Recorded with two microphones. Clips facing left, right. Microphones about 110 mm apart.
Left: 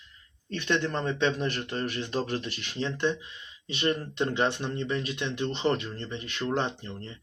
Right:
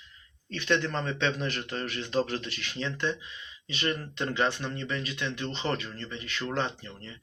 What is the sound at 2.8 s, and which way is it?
Speech, 20° left (ahead or behind).